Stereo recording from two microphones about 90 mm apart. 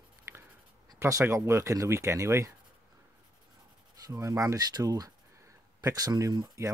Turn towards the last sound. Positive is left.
turn(degrees=-40)  # may be behind; listen again after turning